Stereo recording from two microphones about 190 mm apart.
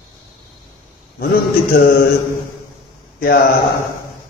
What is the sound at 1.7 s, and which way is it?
Speech, 50° left (ahead or behind).